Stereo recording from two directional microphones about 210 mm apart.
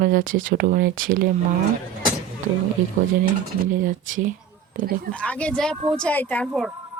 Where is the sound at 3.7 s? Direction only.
40° right (ahead or behind).